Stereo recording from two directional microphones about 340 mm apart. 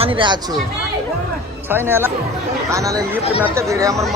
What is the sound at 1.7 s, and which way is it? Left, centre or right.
A woman's voice, centre.